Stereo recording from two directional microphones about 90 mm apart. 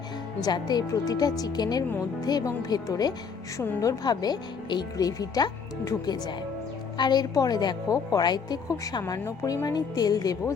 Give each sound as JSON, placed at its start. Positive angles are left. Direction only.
{"t": 0.4, "sound": "speech", "side_deg": 50}